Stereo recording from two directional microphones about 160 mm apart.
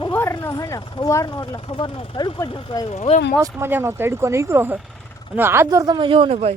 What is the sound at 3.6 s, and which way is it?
Speech, 15° right (ahead or behind).